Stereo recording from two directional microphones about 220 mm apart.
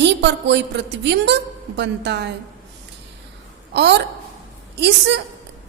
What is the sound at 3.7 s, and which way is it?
A woman's voice, 50° right (ahead or behind).